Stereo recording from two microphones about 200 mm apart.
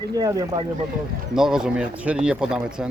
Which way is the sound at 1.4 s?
5° right (ahead or behind).